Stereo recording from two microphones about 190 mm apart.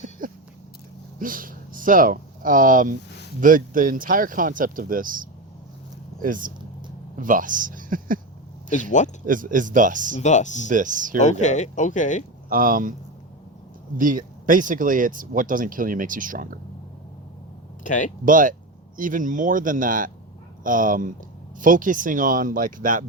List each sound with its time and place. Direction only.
0.2 s a sound: 45° right (ahead or behind)
1.2 s speech: 45° right (ahead or behind)
8.7 s speech: 40° left (ahead or behind)
9.2 s speech: 45° right (ahead or behind)
10.2 s speech: 40° left (ahead or behind)
10.7 s speech: 45° right (ahead or behind)
11.2 s speech: 40° left (ahead or behind)
12.5 s speech: 45° right (ahead or behind)
13.9 s speech: 45° right (ahead or behind)
17.8 s speech: 45° left (ahead or behind)
18.3 s speech: 45° right (ahead or behind)